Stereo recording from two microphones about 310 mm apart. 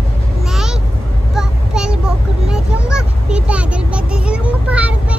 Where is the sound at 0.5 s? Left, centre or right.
Centre.